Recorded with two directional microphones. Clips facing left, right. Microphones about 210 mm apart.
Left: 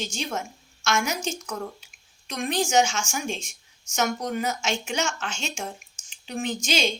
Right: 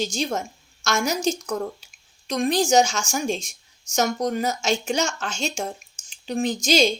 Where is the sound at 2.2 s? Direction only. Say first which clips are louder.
Right 5 dB; 35° right (ahead or behind).